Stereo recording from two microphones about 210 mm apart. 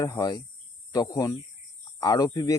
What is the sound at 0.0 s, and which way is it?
Speech, 15° left (ahead or behind).